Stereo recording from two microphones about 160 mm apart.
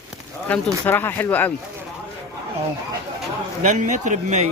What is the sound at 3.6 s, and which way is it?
Speech, 50° right (ahead or behind).